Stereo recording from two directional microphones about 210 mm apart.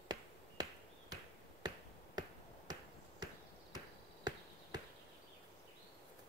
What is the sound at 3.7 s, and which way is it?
Basketball bounce, 20° right (ahead or behind).